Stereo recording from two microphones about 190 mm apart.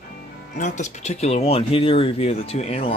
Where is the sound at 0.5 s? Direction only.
40° left (ahead or behind).